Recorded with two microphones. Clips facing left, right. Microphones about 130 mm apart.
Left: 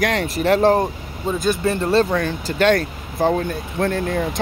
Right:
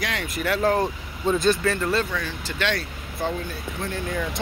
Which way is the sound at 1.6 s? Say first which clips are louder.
Left 6 dB; 30° left (ahead or behind).